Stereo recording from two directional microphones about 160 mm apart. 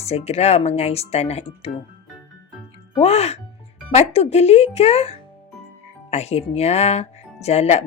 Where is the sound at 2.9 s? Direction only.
40° left (ahead or behind).